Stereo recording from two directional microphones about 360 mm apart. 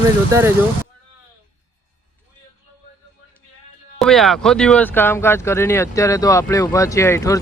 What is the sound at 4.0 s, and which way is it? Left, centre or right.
Speech, centre.